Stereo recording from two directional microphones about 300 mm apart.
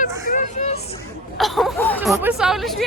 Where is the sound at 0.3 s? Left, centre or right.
Left.